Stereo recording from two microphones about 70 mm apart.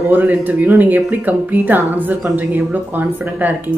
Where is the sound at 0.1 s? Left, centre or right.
Right.